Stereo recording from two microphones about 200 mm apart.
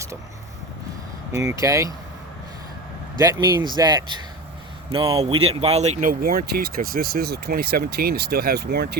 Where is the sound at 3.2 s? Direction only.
15° right (ahead or behind); by 9.0 s 55° right (ahead or behind).